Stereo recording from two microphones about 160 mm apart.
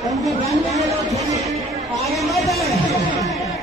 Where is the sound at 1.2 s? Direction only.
20° right (ahead or behind).